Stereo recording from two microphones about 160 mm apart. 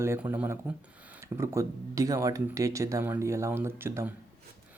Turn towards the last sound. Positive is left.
turn(degrees=-15)  # may be behind; listen again after turning